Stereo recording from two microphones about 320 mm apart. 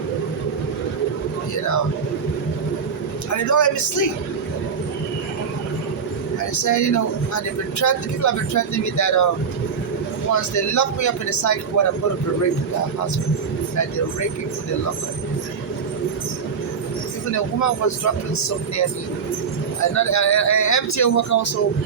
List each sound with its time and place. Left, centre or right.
3.3 s speech: left
6.5 s speech: left
10.3 s speech: left
17.3 s speech: left